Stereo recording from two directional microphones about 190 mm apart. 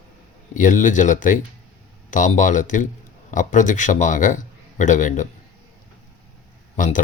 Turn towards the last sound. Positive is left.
turn(degrees=45)  # may be behind; listen again after turning